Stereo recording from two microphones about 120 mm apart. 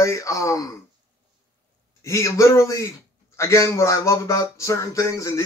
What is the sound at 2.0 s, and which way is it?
Speech, 25° left (ahead or behind).